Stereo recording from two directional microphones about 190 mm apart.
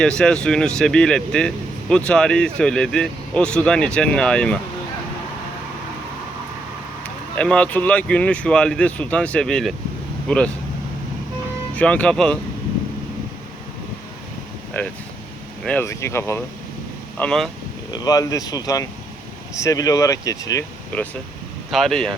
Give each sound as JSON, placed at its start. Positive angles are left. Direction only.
{"t": 0.0, "sound": "speech", "side_deg": 5}
{"t": 7.0, "sound": "speech", "side_deg": 5}
{"t": 11.7, "sound": "speech", "side_deg": 5}
{"t": 14.8, "sound": "speech", "side_deg": 10}
{"t": 17.2, "sound": "speech", "side_deg": 5}
{"t": 17.9, "sound": "speech", "side_deg": 20}
{"t": 21.7, "sound": "speech", "side_deg": 0}